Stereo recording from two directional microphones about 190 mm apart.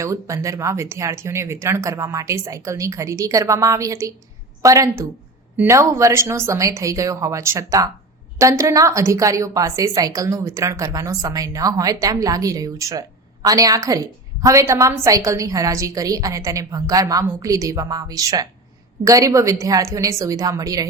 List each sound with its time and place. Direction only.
0.0 s a woman's voice: 15° right (ahead or behind)